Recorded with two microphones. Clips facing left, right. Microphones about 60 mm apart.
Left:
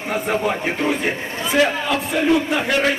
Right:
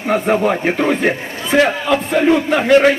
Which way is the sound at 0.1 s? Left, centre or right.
Right.